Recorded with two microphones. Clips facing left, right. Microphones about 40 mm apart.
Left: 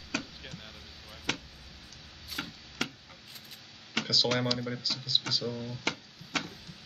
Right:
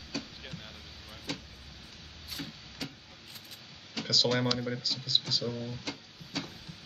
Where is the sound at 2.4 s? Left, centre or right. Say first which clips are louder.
Left 4 dB; left.